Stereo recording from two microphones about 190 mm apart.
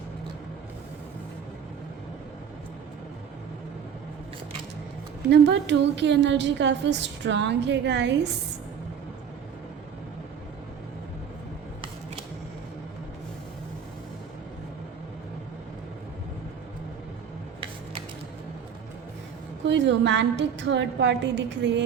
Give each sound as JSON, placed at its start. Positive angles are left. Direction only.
{"t": 5.3, "sound": "a woman's voice", "side_deg": -70}
{"t": 19.6, "sound": "a woman's voice", "side_deg": -70}